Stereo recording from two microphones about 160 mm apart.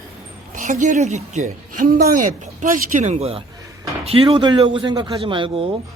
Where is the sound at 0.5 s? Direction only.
55° right (ahead or behind); by 5.7 s 35° right (ahead or behind).